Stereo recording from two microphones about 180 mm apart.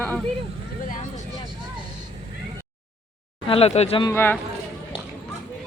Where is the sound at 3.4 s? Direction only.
35° left (ahead or behind).